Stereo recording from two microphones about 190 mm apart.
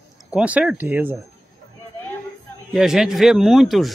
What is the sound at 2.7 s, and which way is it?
A man's voice, centre (ahead or behind).